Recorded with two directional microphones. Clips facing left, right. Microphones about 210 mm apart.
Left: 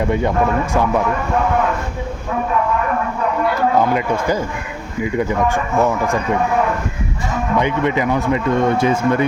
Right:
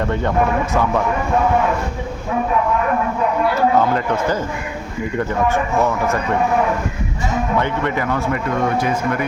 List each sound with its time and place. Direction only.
0.0 s speech: 10° left (ahead or behind)
3.8 s speech: 10° left (ahead or behind)
7.6 s speech: 15° left (ahead or behind)